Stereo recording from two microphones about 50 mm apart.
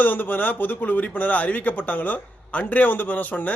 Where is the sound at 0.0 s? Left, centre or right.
Left.